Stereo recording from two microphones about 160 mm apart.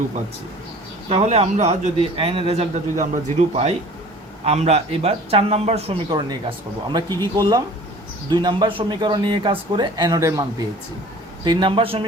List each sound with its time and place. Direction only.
1.1 s a man's voice: 40° right (ahead or behind)
7.2 s a man's voice: 25° right (ahead or behind)